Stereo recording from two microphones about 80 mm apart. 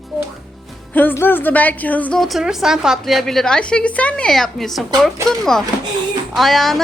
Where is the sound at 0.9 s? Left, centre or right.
Left.